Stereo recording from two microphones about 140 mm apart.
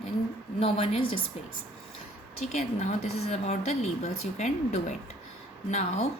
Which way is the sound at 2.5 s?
55° left (ahead or behind).